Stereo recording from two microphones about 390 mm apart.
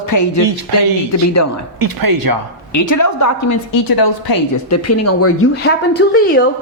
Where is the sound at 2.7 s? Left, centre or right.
Left.